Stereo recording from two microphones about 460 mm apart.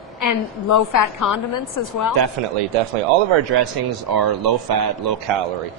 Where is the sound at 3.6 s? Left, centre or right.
Right.